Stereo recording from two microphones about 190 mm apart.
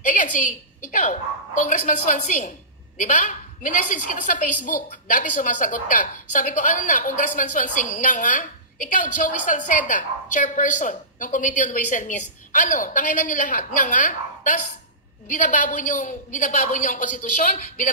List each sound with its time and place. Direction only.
0.0 s a woman's voice: 45° left (ahead or behind)